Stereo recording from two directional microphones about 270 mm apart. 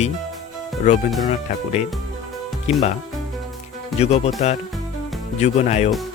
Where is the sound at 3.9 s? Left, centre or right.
Left.